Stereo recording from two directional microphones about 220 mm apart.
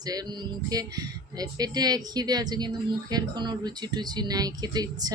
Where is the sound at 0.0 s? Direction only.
15° right (ahead or behind).